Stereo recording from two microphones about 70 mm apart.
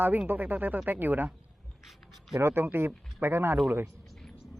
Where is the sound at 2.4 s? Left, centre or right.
Right.